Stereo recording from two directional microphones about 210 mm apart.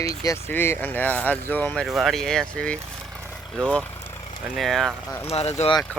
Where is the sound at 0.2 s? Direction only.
15° left (ahead or behind).